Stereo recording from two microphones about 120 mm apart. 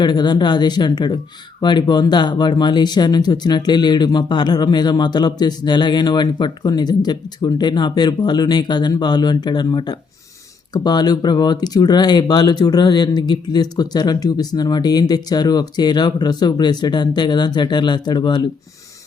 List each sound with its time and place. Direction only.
0.0 s speech: 35° left (ahead or behind)